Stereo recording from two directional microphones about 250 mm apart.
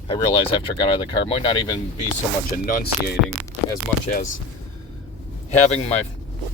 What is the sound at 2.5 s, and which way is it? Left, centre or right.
Speech, left.